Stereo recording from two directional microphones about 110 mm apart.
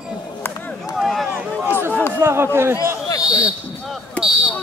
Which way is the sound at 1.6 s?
20° right (ahead or behind).